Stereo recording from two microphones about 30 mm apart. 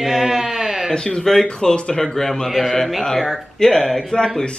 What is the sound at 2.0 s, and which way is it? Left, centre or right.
Speech, left.